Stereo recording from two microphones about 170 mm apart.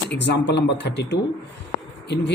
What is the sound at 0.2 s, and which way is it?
Speech, 90° left.